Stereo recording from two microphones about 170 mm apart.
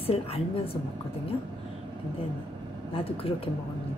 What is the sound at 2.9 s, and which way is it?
Speech, 35° left (ahead or behind).